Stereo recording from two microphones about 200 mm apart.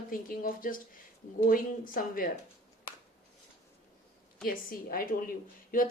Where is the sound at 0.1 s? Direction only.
45° left (ahead or behind).